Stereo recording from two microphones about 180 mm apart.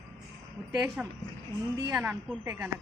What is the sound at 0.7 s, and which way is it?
A man's voice, 15° right (ahead or behind).